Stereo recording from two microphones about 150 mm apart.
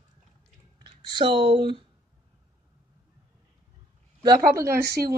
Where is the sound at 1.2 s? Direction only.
35° right (ahead or behind).